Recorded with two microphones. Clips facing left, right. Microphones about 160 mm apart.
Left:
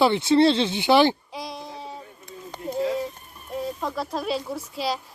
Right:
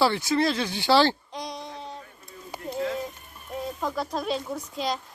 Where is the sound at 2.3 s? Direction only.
90° left.